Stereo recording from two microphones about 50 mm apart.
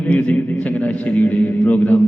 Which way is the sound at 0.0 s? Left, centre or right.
Left.